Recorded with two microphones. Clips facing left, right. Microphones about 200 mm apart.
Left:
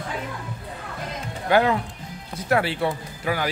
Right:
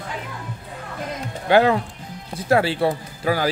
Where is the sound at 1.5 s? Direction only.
30° right (ahead or behind).